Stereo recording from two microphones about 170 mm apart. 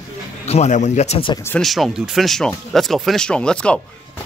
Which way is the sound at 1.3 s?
15° left (ahead or behind).